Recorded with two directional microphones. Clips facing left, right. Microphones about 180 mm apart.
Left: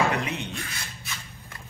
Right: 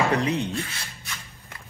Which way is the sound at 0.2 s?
35° right (ahead or behind).